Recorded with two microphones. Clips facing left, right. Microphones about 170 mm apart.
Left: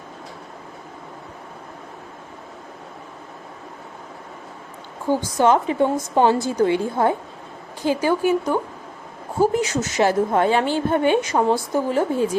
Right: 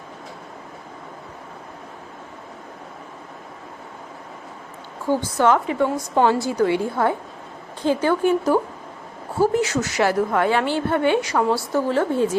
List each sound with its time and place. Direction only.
5.0 s a woman's voice: 15° left (ahead or behind)
9.4 s a woman's voice: 20° left (ahead or behind)